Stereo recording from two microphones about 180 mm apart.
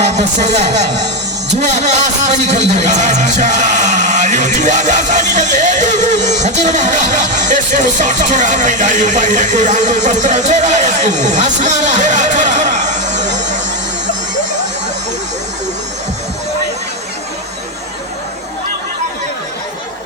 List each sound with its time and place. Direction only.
0.0 s speech: 40° right (ahead or behind)
0.9 s music: 70° right (ahead or behind)
1.7 s speech: 40° right (ahead or behind)